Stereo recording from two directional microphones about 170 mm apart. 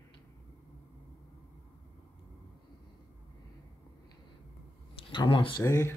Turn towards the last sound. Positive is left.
turn(degrees=20)  # may be behind; listen again after turning